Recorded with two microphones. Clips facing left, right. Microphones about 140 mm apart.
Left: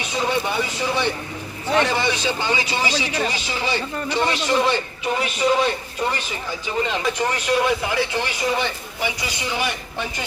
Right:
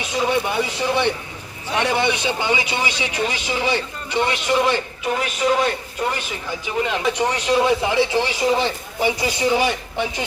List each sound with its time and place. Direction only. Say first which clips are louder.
0.2 s speech: right 2 dB; 10° right (ahead or behind)
1.7 s speech: even; 15° right (ahead or behind)
5.0 s a man's voice: even; centre (ahead or behind); by 9.7 s 30° right (ahead or behind)